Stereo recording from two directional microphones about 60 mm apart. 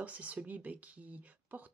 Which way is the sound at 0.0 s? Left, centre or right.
Right.